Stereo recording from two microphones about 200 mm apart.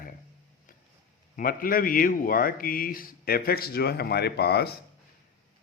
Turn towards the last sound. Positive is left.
turn(degrees=55)  # may be behind; listen again after turning